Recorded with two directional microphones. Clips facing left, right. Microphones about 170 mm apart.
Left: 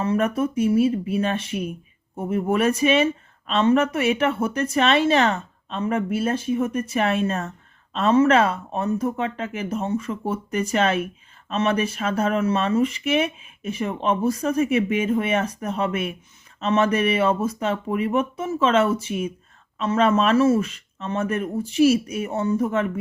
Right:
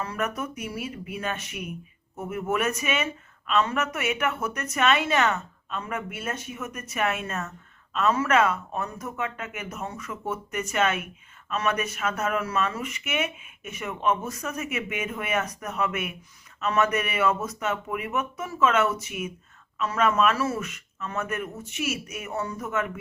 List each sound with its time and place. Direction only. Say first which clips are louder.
0.0 s speech: left 9 dB; 25° left (ahead or behind)